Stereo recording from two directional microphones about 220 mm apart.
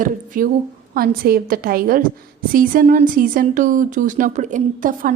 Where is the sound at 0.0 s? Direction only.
40° right (ahead or behind).